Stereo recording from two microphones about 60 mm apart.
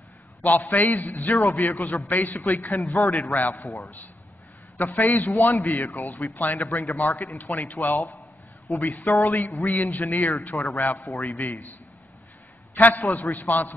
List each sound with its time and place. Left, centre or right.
0.4 s a man's voice: left
4.7 s a man's voice: left
12.7 s a man's voice: left